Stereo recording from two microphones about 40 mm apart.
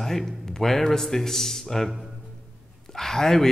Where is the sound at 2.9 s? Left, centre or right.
Centre.